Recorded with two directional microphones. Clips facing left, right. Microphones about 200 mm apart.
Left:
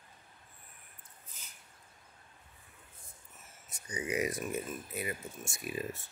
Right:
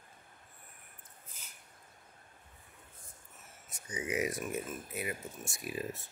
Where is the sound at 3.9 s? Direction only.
Centre (ahead or behind).